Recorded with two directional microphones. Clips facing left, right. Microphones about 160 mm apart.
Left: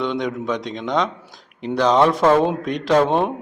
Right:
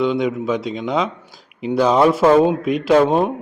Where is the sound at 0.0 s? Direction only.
5° right (ahead or behind).